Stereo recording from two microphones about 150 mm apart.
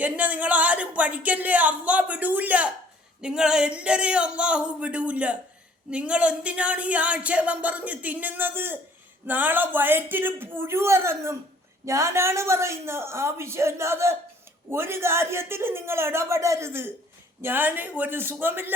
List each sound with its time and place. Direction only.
0.0 s speech: 10° right (ahead or behind)